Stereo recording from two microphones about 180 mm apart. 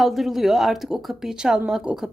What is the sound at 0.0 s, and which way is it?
A woman's voice, centre (ahead or behind).